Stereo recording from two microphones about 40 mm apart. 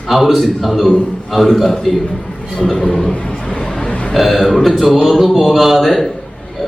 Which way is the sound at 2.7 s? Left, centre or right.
Centre.